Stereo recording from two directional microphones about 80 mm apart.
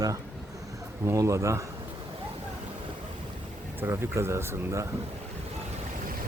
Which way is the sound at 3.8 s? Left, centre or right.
Right.